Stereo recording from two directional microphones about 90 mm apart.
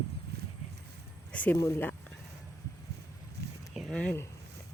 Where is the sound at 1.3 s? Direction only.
15° left (ahead or behind).